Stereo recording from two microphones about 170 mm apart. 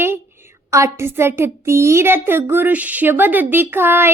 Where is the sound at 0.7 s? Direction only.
15° right (ahead or behind).